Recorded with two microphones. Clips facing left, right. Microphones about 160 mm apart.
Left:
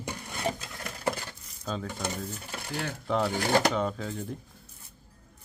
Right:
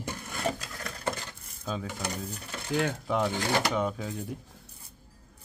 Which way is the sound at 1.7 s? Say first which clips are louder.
Even; 5° right (ahead or behind).